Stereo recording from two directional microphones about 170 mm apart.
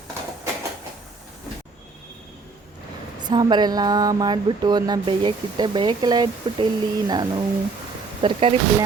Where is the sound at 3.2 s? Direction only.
25° right (ahead or behind).